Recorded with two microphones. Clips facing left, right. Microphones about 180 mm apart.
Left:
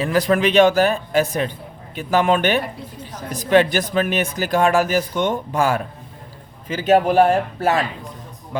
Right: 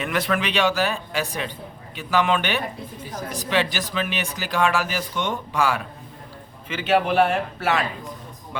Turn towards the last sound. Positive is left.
turn(degrees=40)  # may be behind; listen again after turning